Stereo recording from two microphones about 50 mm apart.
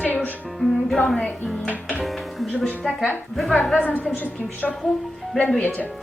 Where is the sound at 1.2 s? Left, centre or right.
Left.